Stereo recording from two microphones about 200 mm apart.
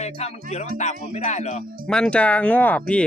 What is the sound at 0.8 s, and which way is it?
Speech, 35° left (ahead or behind).